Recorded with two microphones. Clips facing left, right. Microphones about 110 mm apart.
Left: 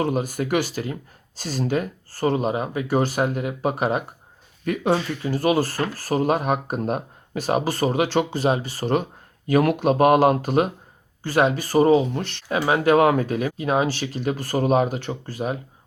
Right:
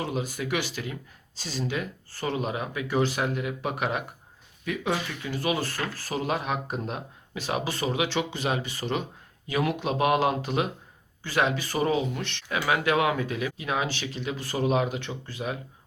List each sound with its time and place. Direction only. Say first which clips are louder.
0.0 s speech: left 7 dB; 50° left (ahead or behind)
4.6 s speech: left 7 dB; 50° left (ahead or behind)